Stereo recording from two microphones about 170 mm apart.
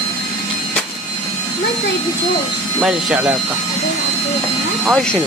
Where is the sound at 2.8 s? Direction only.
5° right (ahead or behind).